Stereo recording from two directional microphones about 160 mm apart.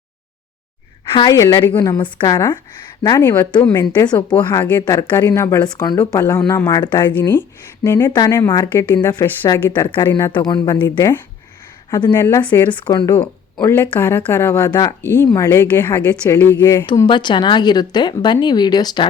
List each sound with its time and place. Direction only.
1.3 s speech: 20° left (ahead or behind)
7.0 s a woman's voice: 10° left (ahead or behind); by 10.8 s 25° left (ahead or behind)
11.9 s speech: 25° left (ahead or behind)
12.1 s a woman's voice: 15° left (ahead or behind)
12.7 s a woman's voice: 30° left (ahead or behind)
15.0 s a woman's voice: 15° left (ahead or behind)
16.6 s speech: 25° left (ahead or behind)